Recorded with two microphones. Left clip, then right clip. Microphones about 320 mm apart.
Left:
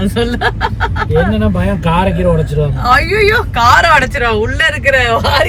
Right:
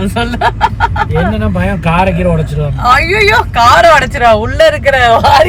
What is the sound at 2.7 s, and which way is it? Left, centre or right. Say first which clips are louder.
Speech: right 3 dB; centre.